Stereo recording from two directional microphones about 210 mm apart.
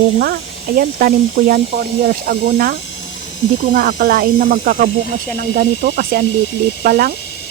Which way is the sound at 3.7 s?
45° right (ahead or behind).